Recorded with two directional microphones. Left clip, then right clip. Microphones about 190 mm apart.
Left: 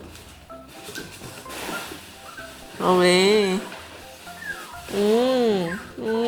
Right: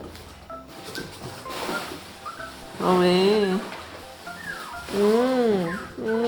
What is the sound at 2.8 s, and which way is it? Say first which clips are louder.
Speech: left 2 dB; 15° left (ahead or behind).